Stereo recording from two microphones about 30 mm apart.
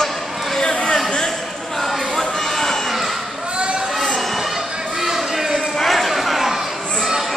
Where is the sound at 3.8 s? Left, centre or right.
Centre.